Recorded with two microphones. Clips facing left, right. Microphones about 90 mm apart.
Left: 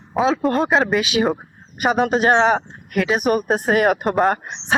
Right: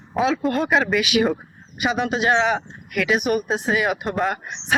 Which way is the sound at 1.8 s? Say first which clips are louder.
Left 4 dB; 45° left (ahead or behind).